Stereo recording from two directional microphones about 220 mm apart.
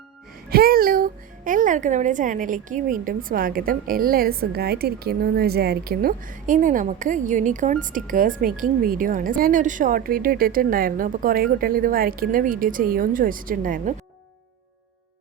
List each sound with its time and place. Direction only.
0.5 s speech: 40° right (ahead or behind)